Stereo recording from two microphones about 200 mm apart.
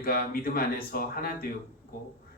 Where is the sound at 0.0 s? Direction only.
50° left (ahead or behind).